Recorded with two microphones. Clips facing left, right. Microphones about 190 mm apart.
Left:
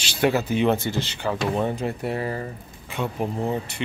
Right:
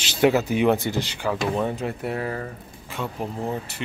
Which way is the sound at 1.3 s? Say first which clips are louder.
Even; 5° left (ahead or behind).